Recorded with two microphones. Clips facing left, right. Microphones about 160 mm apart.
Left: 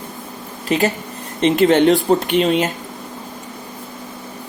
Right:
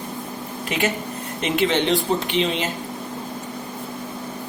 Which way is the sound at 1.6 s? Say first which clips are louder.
Left 7 dB; 50° left (ahead or behind).